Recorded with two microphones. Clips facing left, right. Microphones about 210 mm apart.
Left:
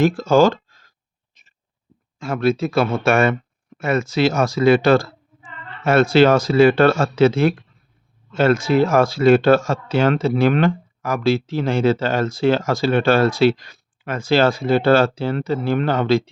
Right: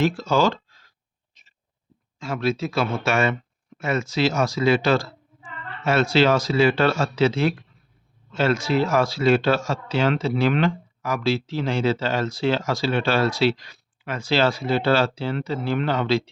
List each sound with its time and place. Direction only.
0.0 s speech: 50° left (ahead or behind)
2.1 s speech: 55° left (ahead or behind)